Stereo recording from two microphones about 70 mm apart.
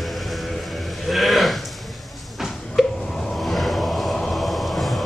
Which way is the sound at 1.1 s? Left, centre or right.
Centre.